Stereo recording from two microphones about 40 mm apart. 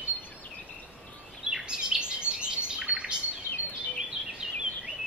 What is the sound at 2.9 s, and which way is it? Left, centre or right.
Bird, right.